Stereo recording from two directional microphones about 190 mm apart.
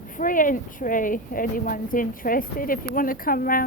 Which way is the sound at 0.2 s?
45° left (ahead or behind).